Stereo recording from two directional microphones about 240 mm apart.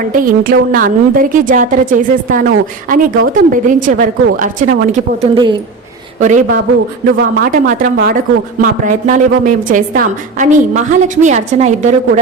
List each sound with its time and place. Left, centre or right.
0.0 s a woman's voice: right
6.1 s a woman's voice: right